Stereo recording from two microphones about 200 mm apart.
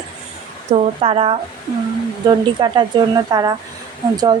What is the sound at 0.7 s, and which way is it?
Speech, 30° right (ahead or behind).